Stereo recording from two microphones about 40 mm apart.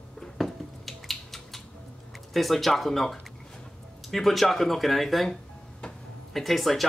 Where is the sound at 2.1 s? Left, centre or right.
Centre.